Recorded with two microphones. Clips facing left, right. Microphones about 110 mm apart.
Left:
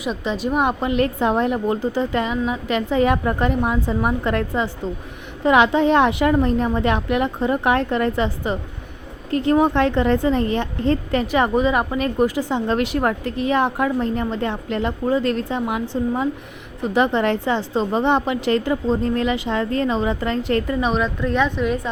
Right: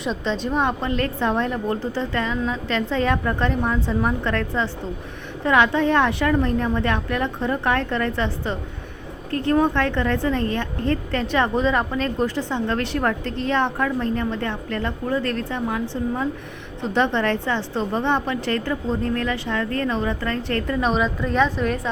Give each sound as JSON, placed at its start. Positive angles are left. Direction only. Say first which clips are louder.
{"t": 0.0, "sound": "a woman's voice", "louder": "left 1 dB", "side_deg": 10}
{"t": 16.8, "sound": "a woman's voice", "louder": "left 3 dB", "side_deg": 10}
{"t": 20.7, "sound": "a woman's voice", "louder": "left 1 dB", "side_deg": 0}